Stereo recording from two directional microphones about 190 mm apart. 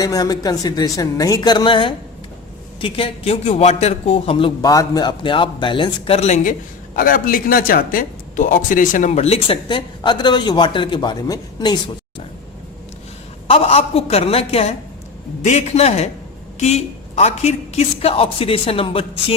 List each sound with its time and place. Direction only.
0.0 s a woman's voice: 20° left (ahead or behind)
13.5 s a man's voice: 30° left (ahead or behind)